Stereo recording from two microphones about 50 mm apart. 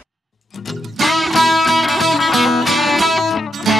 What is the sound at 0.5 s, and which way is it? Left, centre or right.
Music, centre.